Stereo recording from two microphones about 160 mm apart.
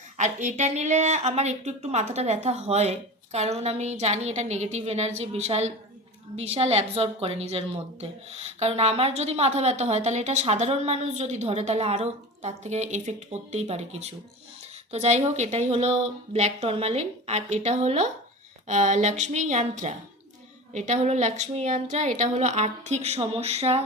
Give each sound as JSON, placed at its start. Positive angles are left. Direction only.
{"t": 0.2, "sound": "a woman's voice", "side_deg": -50}